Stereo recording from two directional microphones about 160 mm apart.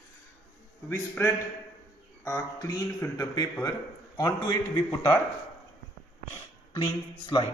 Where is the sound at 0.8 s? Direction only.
15° left (ahead or behind).